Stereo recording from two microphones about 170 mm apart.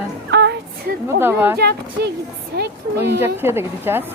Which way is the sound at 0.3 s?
90° right.